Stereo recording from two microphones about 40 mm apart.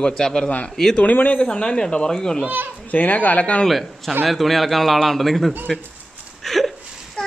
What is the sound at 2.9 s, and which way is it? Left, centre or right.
Speech, left.